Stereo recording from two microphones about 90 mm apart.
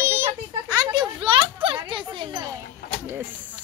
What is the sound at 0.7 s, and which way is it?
Children playing, 50° right (ahead or behind).